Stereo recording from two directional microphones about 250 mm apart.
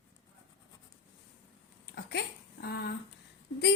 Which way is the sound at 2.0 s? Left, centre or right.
Left.